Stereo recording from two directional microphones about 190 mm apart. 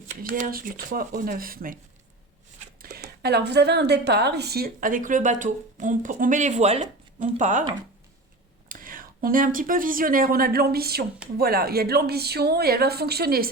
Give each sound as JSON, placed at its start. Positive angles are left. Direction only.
{"t": 0.2, "sound": "speech", "side_deg": -45}
{"t": 3.2, "sound": "speech", "side_deg": -60}
{"t": 8.7, "sound": "speech", "side_deg": -45}